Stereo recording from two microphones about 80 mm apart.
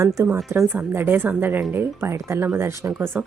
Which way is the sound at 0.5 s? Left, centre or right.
Right.